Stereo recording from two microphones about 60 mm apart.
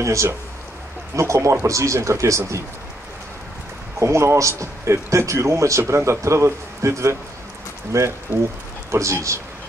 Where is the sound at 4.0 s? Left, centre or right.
Right.